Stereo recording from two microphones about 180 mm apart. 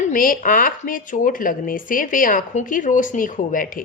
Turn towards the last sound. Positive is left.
turn(degrees=50)  # may be behind; listen again after turning